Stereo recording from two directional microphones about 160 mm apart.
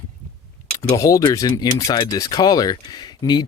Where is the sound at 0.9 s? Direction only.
20° left (ahead or behind).